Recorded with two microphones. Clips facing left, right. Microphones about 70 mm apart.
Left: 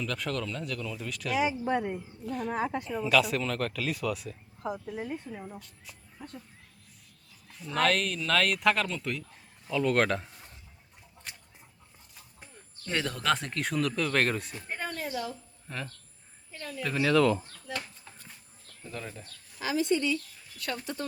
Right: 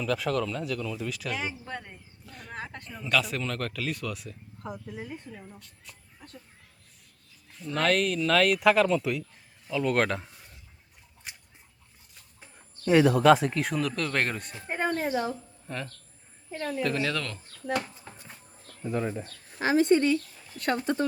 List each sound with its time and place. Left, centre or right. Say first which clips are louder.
0.0 s speech: right 5 dB; centre
1.6 s speech: left 10 dB; centre
2.2 s speech: left 9 dB; centre
7.6 s a man's voice: right 2 dB; centre
11.3 s a sound: right 1 dB; centre
12.5 s speech: right 12 dB; centre
14.7 s a sound: right 7 dB; right
15.6 s speech: right 2 dB; centre
16.5 s speech: right 8 dB; right
16.8 s speech: left 7 dB; centre
18.9 s speech: right 10 dB; right
19.2 s speech: right 6 dB; right
20.5 s speech: right 8 dB; right